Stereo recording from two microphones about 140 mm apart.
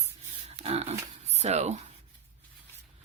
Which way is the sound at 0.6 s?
50° right (ahead or behind).